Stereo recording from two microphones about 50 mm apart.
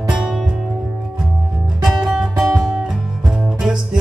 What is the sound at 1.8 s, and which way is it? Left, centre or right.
Music, centre.